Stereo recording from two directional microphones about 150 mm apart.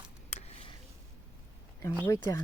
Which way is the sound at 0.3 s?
45° left (ahead or behind).